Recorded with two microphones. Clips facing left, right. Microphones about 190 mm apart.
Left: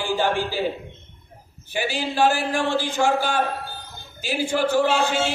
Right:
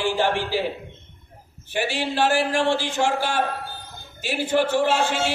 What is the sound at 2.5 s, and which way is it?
Speech, 80° right.